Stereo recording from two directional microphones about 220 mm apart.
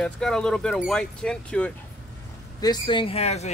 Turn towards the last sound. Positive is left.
turn(degrees=30)  # may be behind; listen again after turning